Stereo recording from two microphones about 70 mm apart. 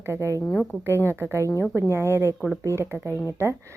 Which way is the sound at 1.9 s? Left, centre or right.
Right.